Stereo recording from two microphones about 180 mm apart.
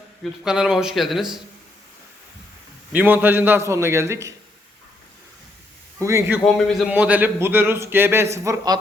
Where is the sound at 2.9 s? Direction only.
10° right (ahead or behind).